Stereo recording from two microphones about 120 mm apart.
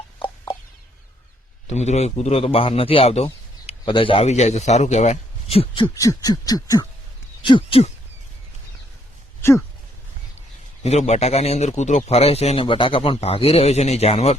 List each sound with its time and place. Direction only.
1.6 s speech: 70° left (ahead or behind); by 4.3 s 50° left (ahead or behind)
4.3 s speech: 65° left (ahead or behind); by 5.9 s 50° left (ahead or behind)
5.9 s a sound: 30° left (ahead or behind)
7.4 s speech: 45° left (ahead or behind)
9.4 s speech: 20° left (ahead or behind)
10.8 s speech: 70° left (ahead or behind)